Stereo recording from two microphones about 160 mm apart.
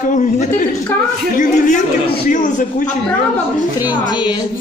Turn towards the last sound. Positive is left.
turn(degrees=25)  # may be behind; listen again after turning